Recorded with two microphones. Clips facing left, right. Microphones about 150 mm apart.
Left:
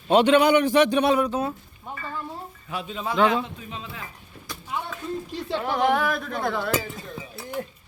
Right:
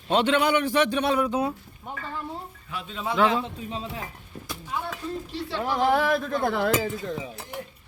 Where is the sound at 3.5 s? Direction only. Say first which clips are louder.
Right 4 dB; 35° right (ahead or behind).